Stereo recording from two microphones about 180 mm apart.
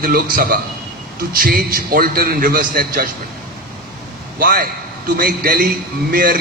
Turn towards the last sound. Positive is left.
turn(degrees=-55)  # may be behind; listen again after turning